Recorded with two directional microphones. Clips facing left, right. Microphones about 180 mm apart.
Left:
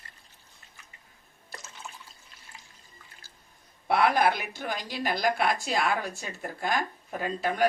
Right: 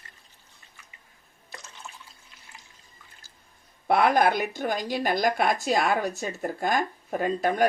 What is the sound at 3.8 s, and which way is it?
Speech, 50° right (ahead or behind).